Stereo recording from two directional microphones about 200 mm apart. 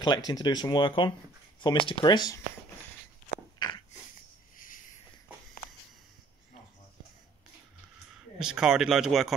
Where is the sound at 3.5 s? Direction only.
20° left (ahead or behind).